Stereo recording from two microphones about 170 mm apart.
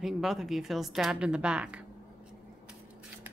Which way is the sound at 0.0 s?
Centre (ahead or behind).